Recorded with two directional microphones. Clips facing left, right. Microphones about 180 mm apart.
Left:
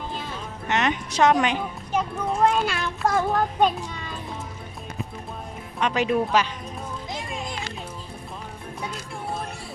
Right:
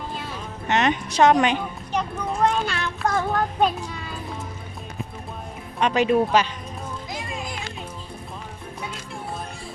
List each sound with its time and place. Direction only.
0.7 s speech: 30° right (ahead or behind)
1.9 s a child's voice: 5° left (ahead or behind)
5.8 s speech: 25° right (ahead or behind)